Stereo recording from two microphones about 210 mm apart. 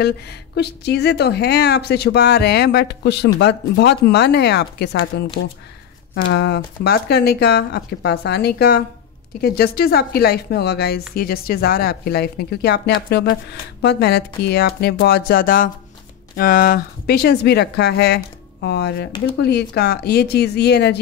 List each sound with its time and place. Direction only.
0.0 s a woman's voice: 50° left (ahead or behind)